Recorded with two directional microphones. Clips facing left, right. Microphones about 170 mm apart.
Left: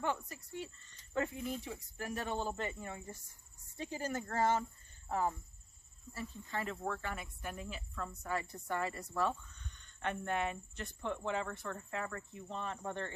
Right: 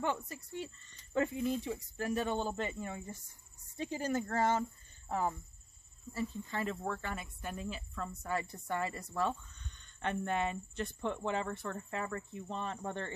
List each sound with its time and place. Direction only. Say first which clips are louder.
0.0 s cricket: right 2 dB; 25° right (ahead or behind)
6.1 s cricket: right 4 dB; 25° right (ahead or behind)